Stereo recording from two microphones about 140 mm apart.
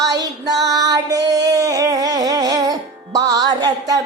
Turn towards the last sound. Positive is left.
turn(degrees=-25)  # may be behind; listen again after turning